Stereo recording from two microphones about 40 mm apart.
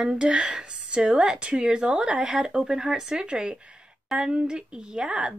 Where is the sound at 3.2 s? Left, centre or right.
Right.